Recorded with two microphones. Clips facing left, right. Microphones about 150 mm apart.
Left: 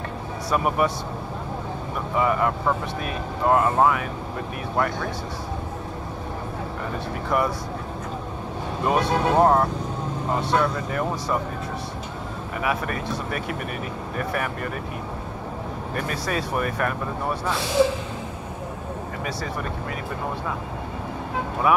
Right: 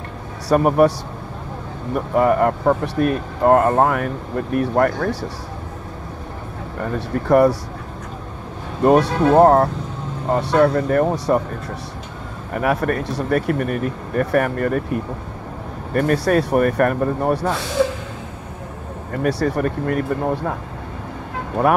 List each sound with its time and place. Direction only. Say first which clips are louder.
0.5 s speech: right 8 dB; 50° right (ahead or behind)
2.0 s speech: right 7 dB; 55° right (ahead or behind)
6.8 s speech: right 10 dB; 60° right (ahead or behind)
8.8 s speech: right 8 dB; 55° right (ahead or behind)
12.5 s speech: right 7 dB; 50° right (ahead or behind)
13.3 s speech: right 10 dB; 50° right (ahead or behind)
15.9 s speech: right 12 dB; 55° right (ahead or behind)
19.2 s speech: right 13 dB; 65° right (ahead or behind)
21.6 s speech: right 4 dB; 65° right (ahead or behind)